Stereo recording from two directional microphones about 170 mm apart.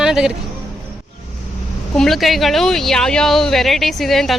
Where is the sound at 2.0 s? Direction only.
Centre (ahead or behind).